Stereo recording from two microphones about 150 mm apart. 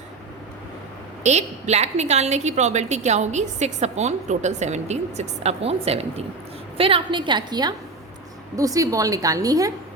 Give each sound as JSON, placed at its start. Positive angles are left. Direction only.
{"t": 1.2, "sound": "a woman's voice", "side_deg": -50}